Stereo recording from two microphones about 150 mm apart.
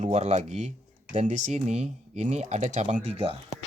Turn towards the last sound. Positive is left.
turn(degrees=-40)  # may be behind; listen again after turning